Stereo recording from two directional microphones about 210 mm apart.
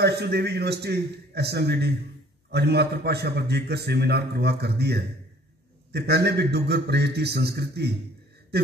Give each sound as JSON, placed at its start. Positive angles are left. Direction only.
{"t": 0.0, "sound": "a man's voice", "side_deg": -50}